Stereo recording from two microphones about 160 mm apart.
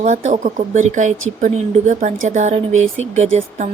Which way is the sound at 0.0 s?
50° right (ahead or behind).